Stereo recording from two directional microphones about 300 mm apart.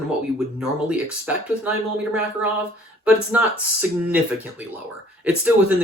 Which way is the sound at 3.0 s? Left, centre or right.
Centre.